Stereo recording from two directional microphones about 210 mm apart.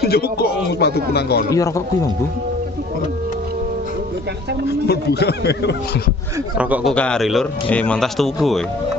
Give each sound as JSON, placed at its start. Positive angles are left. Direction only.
{"t": 0.0, "sound": "speech", "side_deg": 50}
{"t": 4.8, "sound": "speech", "side_deg": 50}
{"t": 6.6, "sound": "speech", "side_deg": -5}